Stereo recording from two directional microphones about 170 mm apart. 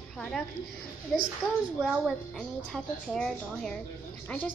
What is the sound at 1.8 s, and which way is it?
A woman's voice, 5° left (ahead or behind).